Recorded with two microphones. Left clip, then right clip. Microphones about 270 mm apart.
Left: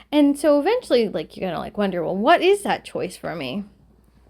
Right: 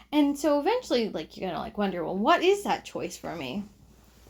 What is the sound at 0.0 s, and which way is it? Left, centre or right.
Speech, left.